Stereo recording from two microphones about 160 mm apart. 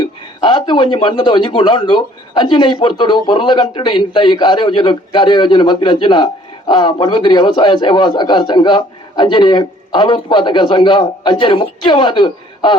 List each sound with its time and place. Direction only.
0.0 s speech: 30° left (ahead or behind)